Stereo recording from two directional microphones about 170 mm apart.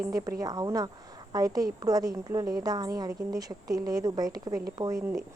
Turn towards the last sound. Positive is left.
turn(degrees=-20)  # may be behind; listen again after turning